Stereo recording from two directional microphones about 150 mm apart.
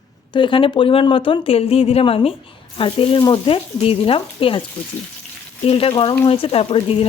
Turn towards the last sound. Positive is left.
turn(degrees=40)  # may be behind; listen again after turning